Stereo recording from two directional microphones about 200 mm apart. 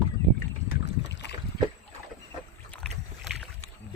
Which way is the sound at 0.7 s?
55° left (ahead or behind).